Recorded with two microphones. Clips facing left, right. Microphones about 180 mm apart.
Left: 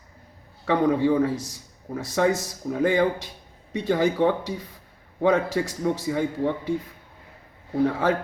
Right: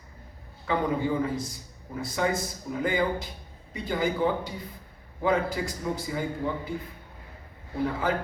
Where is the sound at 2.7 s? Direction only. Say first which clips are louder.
Left 6 dB; 85° left.